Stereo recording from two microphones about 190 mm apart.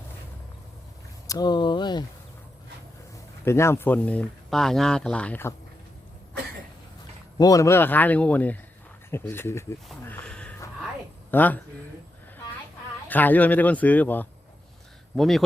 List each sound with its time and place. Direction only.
1.3 s speech: 20° left (ahead or behind)
3.4 s speech: 15° left (ahead or behind)
7.3 s speech: 20° left (ahead or behind)
9.9 s a sound: 5° left (ahead or behind)
11.3 s speech: 10° left (ahead or behind)
13.1 s speech: 10° left (ahead or behind)